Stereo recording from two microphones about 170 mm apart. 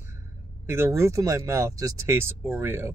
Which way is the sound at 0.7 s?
15° right (ahead or behind).